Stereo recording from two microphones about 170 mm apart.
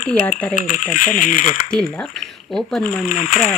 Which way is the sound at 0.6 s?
50° left (ahead or behind).